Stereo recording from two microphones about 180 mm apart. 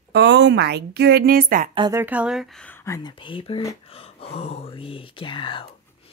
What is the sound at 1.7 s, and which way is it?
Speech, 25° right (ahead or behind).